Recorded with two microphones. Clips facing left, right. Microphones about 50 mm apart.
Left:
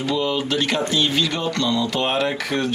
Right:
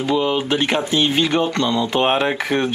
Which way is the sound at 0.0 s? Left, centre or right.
Right.